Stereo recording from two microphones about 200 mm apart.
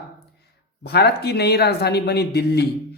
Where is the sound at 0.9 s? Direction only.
55° left (ahead or behind).